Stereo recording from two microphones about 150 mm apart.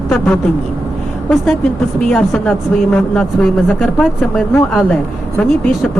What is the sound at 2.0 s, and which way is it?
A woman's voice, 5° left (ahead or behind).